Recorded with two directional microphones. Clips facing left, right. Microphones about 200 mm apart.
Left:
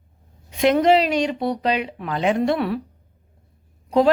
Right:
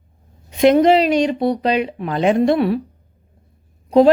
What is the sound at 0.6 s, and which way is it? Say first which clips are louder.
Speech: right 4 dB; 20° right (ahead or behind).